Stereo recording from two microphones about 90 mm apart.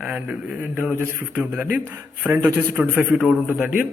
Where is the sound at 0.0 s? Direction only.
10° right (ahead or behind).